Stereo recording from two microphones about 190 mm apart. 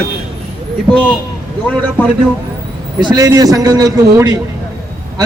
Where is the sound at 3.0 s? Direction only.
20° right (ahead or behind).